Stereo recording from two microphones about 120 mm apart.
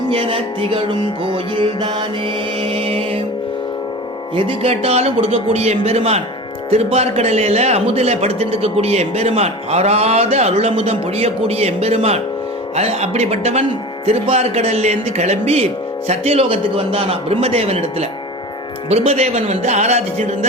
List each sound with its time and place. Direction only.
0.1 s music: 50° right (ahead or behind)
4.4 s speech: 50° right (ahead or behind)
18.9 s speech: 65° right (ahead or behind)